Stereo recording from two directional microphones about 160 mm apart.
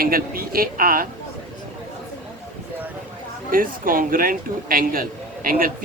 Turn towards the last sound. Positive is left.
turn(degrees=-60)  # may be behind; listen again after turning